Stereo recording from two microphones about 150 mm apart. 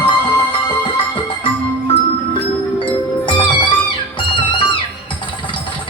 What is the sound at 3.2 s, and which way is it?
Music, 30° left (ahead or behind).